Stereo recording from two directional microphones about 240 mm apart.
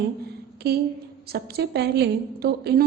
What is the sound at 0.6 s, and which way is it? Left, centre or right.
A woman's voice, right.